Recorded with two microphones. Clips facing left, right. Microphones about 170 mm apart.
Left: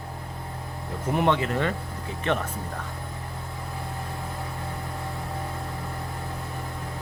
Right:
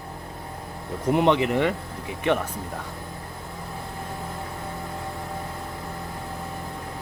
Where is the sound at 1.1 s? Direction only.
20° right (ahead or behind).